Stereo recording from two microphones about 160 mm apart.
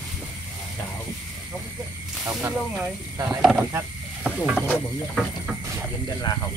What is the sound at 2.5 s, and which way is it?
Speech, 5° right (ahead or behind).